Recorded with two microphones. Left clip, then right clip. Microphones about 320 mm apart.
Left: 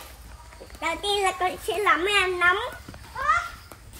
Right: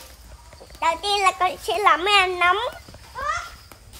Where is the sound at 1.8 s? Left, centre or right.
Right.